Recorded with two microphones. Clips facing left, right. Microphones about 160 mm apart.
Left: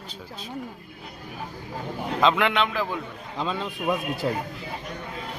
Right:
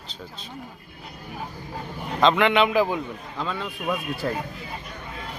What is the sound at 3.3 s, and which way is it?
A man's voice, 15° left (ahead or behind).